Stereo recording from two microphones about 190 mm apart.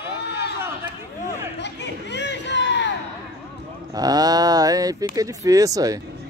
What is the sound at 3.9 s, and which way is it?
Speech, 20° right (ahead or behind).